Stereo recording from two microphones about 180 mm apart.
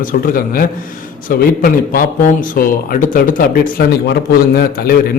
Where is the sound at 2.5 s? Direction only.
50° left (ahead or behind).